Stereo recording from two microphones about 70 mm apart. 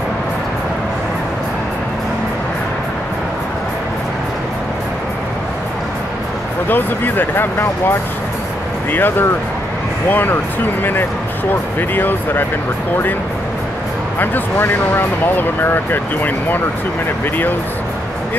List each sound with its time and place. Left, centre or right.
6.7 s speech: left
8.9 s speech: left
14.2 s speech: left